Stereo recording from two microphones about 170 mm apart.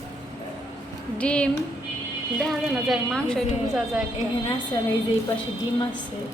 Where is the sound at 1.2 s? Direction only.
5° left (ahead or behind).